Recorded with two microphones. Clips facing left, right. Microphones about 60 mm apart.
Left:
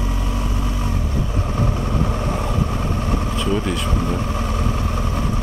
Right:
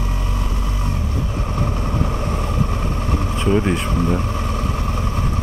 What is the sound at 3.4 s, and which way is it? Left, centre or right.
Vehicle, right.